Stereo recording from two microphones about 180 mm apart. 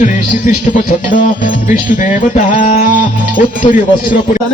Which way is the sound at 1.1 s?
45° left (ahead or behind).